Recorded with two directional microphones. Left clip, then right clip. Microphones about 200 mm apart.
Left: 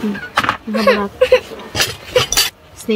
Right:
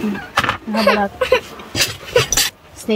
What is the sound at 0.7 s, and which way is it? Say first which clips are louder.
Speech: left 2 dB; 15° right (ahead or behind).